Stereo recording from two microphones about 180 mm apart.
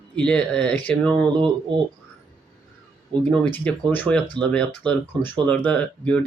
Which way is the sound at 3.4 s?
10° left (ahead or behind).